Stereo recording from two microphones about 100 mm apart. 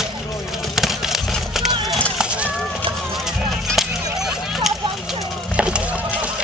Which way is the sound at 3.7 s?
5° right (ahead or behind).